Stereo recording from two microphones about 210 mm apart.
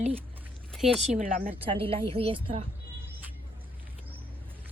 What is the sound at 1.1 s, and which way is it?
Speech, 40° right (ahead or behind).